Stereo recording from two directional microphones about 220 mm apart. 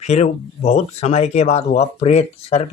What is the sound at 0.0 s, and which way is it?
Speech, 30° left (ahead or behind).